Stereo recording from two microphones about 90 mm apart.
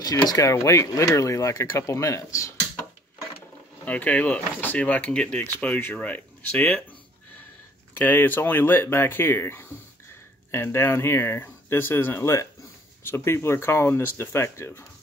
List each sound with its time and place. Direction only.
0.0 s speech: 45° left (ahead or behind)
3.8 s speech: 15° left (ahead or behind)
8.0 s speech: 20° left (ahead or behind)